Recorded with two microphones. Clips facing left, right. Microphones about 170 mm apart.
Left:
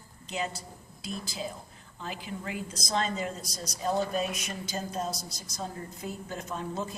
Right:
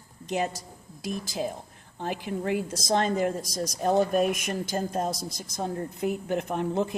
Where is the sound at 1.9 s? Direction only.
55° right (ahead or behind).